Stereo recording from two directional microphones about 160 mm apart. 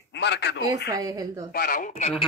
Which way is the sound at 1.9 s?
40° left (ahead or behind).